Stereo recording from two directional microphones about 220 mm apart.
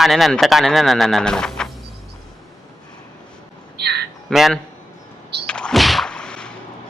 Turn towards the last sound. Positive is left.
turn(degrees=5)  # may be behind; listen again after turning